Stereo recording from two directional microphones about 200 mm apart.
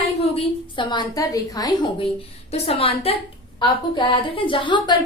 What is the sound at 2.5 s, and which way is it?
A woman's voice, 30° left (ahead or behind).